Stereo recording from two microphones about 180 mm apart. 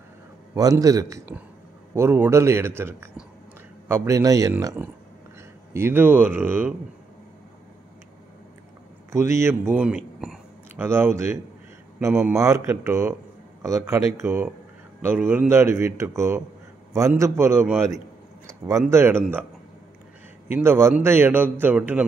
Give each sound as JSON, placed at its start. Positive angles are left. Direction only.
{"t": 0.6, "sound": "a man's voice", "side_deg": -20}
{"t": 9.1, "sound": "a man's voice", "side_deg": -15}
{"t": 20.4, "sound": "a man's voice", "side_deg": -15}